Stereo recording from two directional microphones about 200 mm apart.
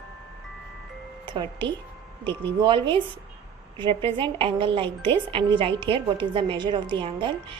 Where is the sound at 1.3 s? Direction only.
25° right (ahead or behind).